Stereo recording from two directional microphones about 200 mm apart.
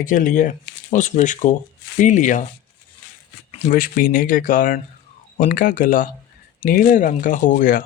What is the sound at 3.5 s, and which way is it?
Speech, 35° left (ahead or behind).